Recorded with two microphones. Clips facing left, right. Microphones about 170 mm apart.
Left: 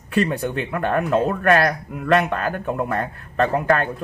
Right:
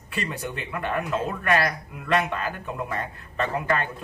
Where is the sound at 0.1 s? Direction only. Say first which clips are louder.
Left 10 dB; 60° left (ahead or behind).